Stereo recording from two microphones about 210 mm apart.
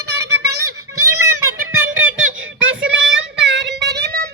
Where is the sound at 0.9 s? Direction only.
90° right.